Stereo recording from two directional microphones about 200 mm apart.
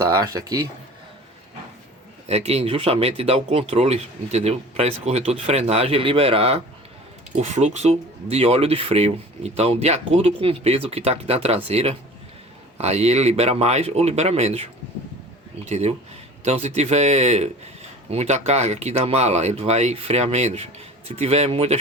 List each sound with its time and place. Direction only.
2.2 s speech: 30° right (ahead or behind)
15.7 s speech: 35° right (ahead or behind)